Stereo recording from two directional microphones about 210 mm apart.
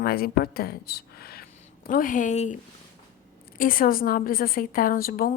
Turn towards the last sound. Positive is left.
turn(degrees=45)  # may be behind; listen again after turning